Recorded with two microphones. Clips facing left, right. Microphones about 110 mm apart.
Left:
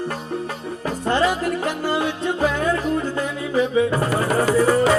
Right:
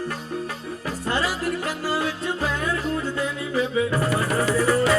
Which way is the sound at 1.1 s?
5° right (ahead or behind).